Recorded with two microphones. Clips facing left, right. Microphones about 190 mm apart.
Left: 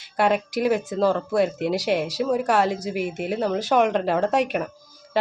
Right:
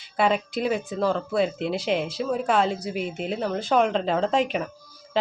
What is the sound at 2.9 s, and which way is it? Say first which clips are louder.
Speech: left 3 dB; 10° left (ahead or behind).